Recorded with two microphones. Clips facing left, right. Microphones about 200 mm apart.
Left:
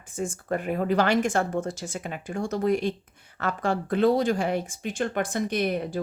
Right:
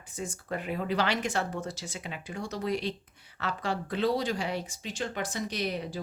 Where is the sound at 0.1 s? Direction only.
50° left (ahead or behind).